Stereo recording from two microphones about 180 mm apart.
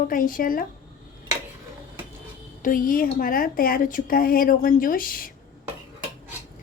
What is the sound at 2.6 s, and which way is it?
A woman's voice, 50° left (ahead or behind).